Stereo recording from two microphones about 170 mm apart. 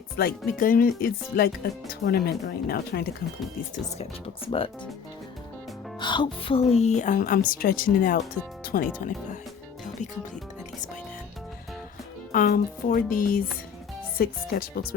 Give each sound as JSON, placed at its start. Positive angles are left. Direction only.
{"t": 0.2, "sound": "speech", "side_deg": 60}
{"t": 6.0, "sound": "a woman's voice", "side_deg": 25}
{"t": 12.3, "sound": "speech", "side_deg": 55}